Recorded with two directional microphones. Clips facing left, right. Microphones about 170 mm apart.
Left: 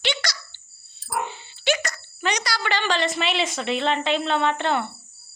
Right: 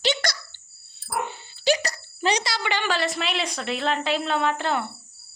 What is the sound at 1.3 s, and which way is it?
Speech, 40° right (ahead or behind).